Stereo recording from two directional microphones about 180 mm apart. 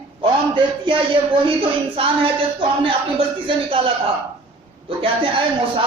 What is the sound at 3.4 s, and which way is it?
Speech, 30° right (ahead or behind).